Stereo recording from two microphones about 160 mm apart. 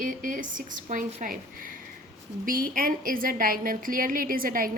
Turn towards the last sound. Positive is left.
turn(degrees=-60)  # may be behind; listen again after turning